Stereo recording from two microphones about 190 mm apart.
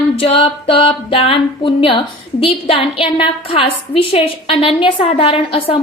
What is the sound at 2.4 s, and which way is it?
A woman's voice, 30° left (ahead or behind).